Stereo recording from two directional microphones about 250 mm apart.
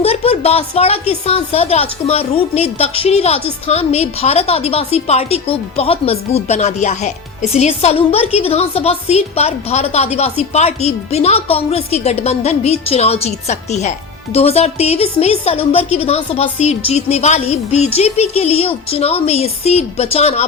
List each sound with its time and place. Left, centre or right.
0.0 s a woman's voice: left